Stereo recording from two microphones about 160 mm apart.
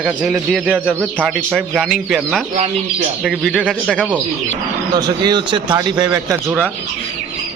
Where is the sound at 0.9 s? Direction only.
5° left (ahead or behind).